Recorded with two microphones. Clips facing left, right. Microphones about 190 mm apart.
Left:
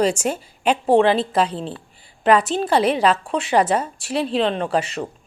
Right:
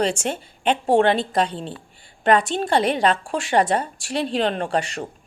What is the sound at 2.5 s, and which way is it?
Speech, 35° left (ahead or behind).